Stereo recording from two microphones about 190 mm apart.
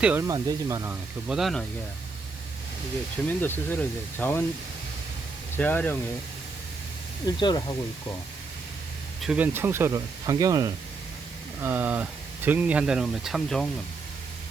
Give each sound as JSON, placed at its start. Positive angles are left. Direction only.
{"t": 0.0, "sound": "speech", "side_deg": -5}
{"t": 0.3, "sound": "speech", "side_deg": -20}
{"t": 1.3, "sound": "speech", "side_deg": 0}
{"t": 3.2, "sound": "speech", "side_deg": 10}
{"t": 5.5, "sound": "speech", "side_deg": 10}
{"t": 7.3, "sound": "speech", "side_deg": 20}
{"t": 9.2, "sound": "speech", "side_deg": -5}